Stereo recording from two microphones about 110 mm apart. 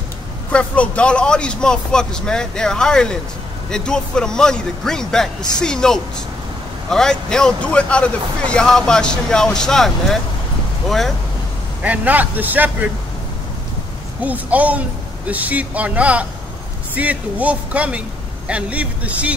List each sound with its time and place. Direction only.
0.5 s speech: 10° left (ahead or behind)
11.8 s speech: 15° right (ahead or behind)
14.2 s speech: 15° right (ahead or behind)